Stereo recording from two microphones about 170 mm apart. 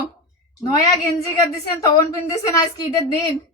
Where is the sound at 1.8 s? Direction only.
20° left (ahead or behind).